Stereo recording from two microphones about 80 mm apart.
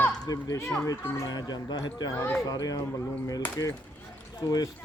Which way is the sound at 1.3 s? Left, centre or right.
Left.